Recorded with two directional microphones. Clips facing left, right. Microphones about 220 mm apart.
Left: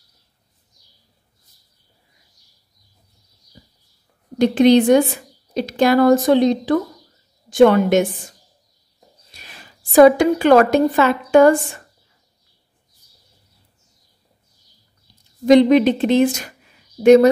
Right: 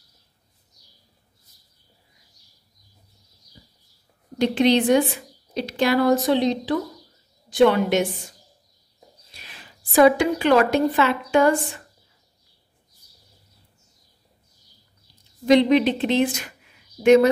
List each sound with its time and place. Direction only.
4.4 s a woman's voice: 45° left (ahead or behind)
9.4 s a woman's voice: 45° left (ahead or behind)
15.4 s a woman's voice: 45° left (ahead or behind)